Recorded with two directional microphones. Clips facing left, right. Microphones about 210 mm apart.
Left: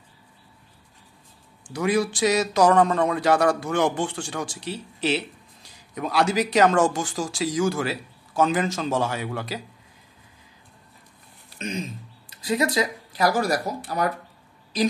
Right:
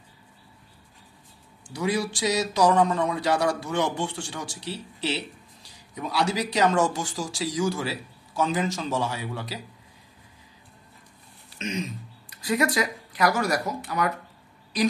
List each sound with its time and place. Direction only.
1.7 s speech: 55° left (ahead or behind)
5.9 s speech: 55° left (ahead or behind)
11.5 s speech: 35° left (ahead or behind)